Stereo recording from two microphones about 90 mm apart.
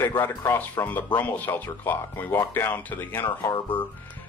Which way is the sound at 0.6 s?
20° left (ahead or behind).